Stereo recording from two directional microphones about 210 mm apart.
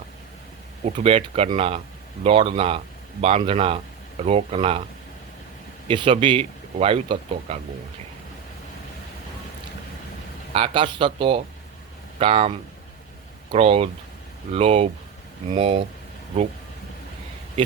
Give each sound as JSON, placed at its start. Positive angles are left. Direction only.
{"t": 0.9, "sound": "a man's voice", "side_deg": -30}
{"t": 5.9, "sound": "a man's voice", "side_deg": -25}
{"t": 10.5, "sound": "a man's voice", "side_deg": -25}